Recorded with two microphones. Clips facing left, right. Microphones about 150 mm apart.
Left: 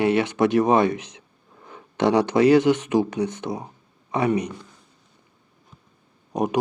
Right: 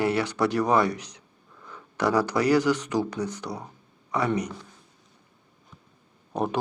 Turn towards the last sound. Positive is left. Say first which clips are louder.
# left 3 dB
turn(degrees=15)  # may be behind; listen again after turning